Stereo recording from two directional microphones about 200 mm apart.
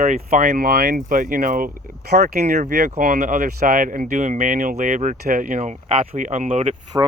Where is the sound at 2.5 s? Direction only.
40° right (ahead or behind).